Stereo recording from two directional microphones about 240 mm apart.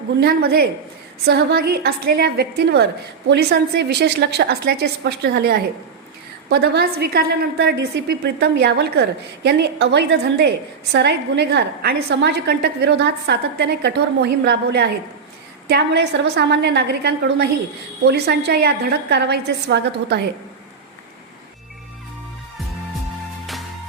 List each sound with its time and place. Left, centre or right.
0.2 s a woman's voice: right